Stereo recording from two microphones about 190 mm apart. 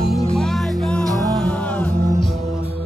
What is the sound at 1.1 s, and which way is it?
Music, 20° right (ahead or behind).